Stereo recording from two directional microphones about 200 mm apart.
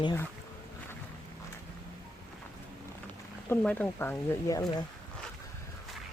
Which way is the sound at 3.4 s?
10° left (ahead or behind).